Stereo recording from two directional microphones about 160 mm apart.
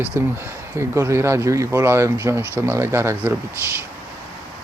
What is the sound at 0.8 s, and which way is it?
Speech, 15° right (ahead or behind).